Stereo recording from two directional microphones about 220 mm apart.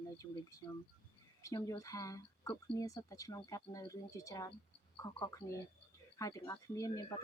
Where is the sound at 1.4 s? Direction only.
15° left (ahead or behind).